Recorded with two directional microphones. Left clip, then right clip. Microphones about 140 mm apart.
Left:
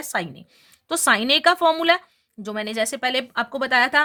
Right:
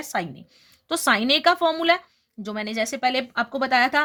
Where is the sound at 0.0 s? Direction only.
30° left (ahead or behind).